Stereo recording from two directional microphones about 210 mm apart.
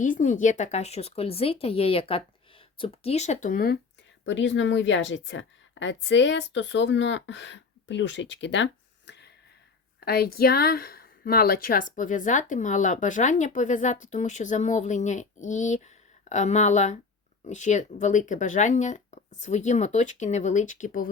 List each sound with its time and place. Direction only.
0.0 s a woman's voice: 35° left (ahead or behind)
4.3 s a woman's voice: 60° left (ahead or behind); by 21.1 s 40° left (ahead or behind)